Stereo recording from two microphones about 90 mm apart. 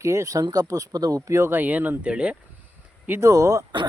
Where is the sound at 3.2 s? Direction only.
35° right (ahead or behind).